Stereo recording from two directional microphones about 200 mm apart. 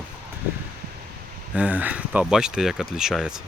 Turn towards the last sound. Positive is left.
turn(degrees=0)  # may be behind; listen again after turning